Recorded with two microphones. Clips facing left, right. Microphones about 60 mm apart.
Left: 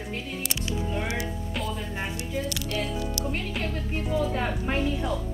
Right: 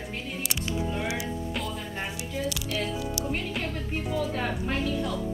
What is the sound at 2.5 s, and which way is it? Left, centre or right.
Music, centre.